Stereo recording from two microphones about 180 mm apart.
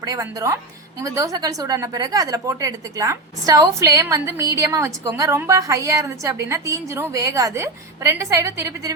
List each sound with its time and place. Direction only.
0.0 s a woman's voice: 20° right (ahead or behind)